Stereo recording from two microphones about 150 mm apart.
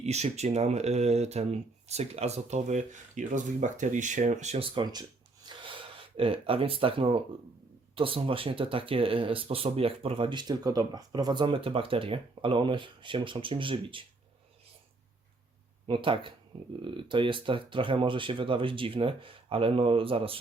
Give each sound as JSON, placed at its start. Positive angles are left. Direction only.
{"t": 0.0, "sound": "speech", "side_deg": -45}
{"t": 5.5, "sound": "a sound", "side_deg": -35}
{"t": 7.9, "sound": "speech", "side_deg": -35}
{"t": 15.9, "sound": "speech", "side_deg": -35}